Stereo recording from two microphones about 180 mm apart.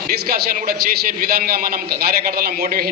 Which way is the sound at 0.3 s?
55° right (ahead or behind).